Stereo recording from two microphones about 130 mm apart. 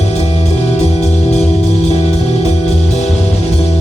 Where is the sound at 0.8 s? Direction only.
55° left (ahead or behind).